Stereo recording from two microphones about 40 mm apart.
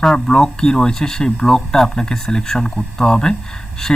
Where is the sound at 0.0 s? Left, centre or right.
Centre.